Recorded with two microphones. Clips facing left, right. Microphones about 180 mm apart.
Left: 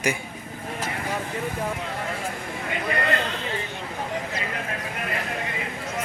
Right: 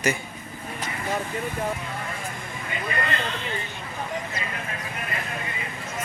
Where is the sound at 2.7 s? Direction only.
70° left (ahead or behind).